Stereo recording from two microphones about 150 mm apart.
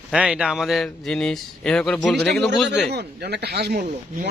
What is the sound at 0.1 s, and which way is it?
Speech, 5° right (ahead or behind).